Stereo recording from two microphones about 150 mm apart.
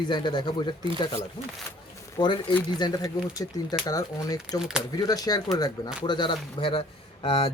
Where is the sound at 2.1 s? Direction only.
30° left (ahead or behind).